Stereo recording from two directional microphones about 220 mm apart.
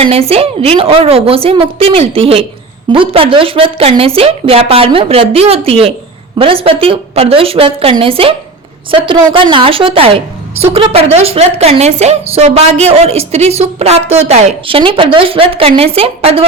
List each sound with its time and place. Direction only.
0.0 s a woman's voice: 25° right (ahead or behind)